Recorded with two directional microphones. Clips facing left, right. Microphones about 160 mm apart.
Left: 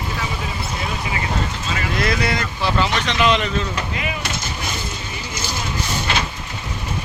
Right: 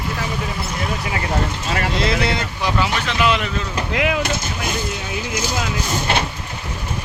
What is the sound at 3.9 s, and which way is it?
Vehicle, 75° right (ahead or behind).